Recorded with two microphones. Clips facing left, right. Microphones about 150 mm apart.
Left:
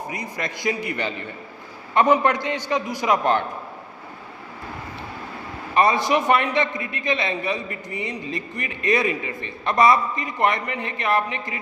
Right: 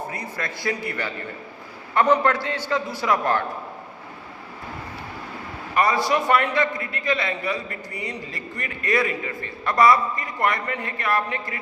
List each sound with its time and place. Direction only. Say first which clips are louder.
0.1 s a man's voice: left 1 dB; 15° left (ahead or behind)
5.7 s a man's voice: left 2 dB; 20° left (ahead or behind)